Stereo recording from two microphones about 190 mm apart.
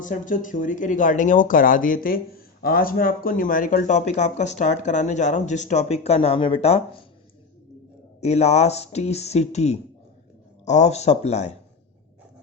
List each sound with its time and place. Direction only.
0.0 s speech: 45° left (ahead or behind)
8.2 s speech: 35° left (ahead or behind)